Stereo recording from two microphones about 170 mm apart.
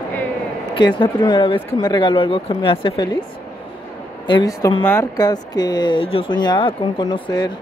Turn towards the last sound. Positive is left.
turn(degrees=25)  # may be behind; listen again after turning